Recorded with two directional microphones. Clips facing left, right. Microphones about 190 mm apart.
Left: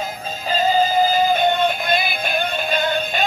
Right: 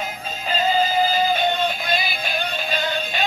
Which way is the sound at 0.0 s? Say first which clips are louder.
Left 2 dB; 40° left (ahead or behind).